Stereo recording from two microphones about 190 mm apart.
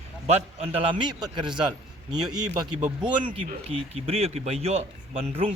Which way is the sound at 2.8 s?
20° right (ahead or behind).